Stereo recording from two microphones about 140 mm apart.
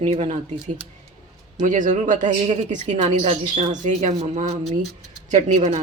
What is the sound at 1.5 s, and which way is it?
Speech, 65° right (ahead or behind).